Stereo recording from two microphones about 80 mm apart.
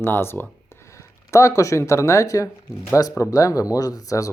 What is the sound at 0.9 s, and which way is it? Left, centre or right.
Speech, left.